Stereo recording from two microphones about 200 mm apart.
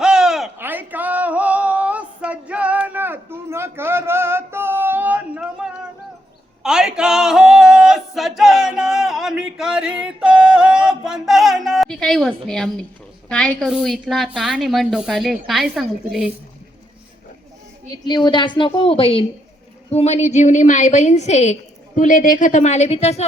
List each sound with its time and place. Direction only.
0.0 s a sound: 5° right (ahead or behind)
14.1 s a woman's voice: centre (ahead or behind)
18.0 s a woman's voice: 20° left (ahead or behind)